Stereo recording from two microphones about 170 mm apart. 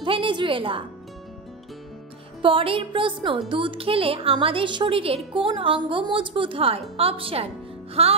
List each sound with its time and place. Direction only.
0.0 s a woman's voice: 30° right (ahead or behind)
2.4 s a woman's voice: 30° right (ahead or behind)